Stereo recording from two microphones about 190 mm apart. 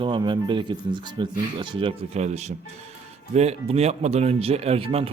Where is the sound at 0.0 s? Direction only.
25° right (ahead or behind).